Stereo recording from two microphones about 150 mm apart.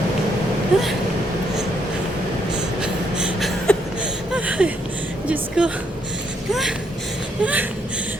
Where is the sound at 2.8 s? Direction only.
5° right (ahead or behind).